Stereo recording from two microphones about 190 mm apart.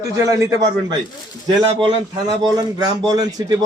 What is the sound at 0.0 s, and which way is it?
A man's voice, 20° right (ahead or behind).